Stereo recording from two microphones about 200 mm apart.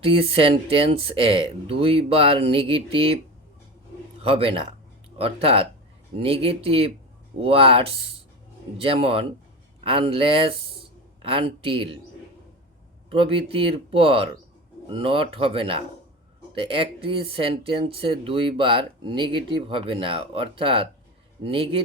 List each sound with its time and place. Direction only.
0.0 s speech: 25° right (ahead or behind)
4.2 s speech: 30° right (ahead or behind)
13.1 s speech: 25° right (ahead or behind)